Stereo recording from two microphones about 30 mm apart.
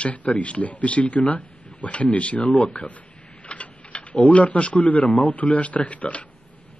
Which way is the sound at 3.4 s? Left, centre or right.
Left.